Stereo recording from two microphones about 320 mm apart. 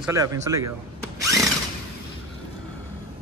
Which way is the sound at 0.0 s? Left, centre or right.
Centre.